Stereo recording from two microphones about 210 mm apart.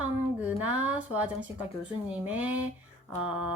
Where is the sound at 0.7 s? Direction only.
5° right (ahead or behind).